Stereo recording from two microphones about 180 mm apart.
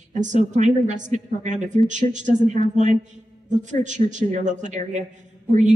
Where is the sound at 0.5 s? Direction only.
45° right (ahead or behind).